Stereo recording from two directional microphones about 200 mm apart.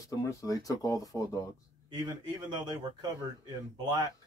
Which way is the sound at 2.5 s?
20° right (ahead or behind).